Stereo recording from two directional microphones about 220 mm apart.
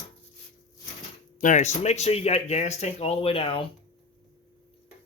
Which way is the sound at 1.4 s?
35° left (ahead or behind).